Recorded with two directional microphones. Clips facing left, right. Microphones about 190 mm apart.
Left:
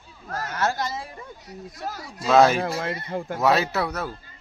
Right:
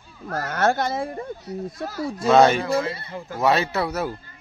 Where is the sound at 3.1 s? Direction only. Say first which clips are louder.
Left 5 dB; 55° left (ahead or behind).